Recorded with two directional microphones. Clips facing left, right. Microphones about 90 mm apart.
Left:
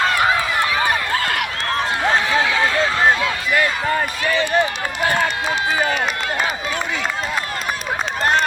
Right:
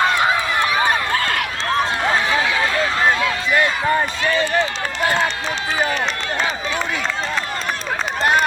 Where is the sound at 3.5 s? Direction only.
25° right (ahead or behind).